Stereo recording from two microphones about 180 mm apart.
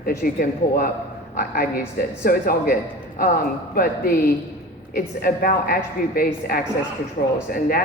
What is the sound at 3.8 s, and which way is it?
A man's voice, 55° left (ahead or behind).